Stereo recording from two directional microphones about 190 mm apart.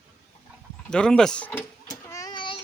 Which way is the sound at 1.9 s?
15° left (ahead or behind).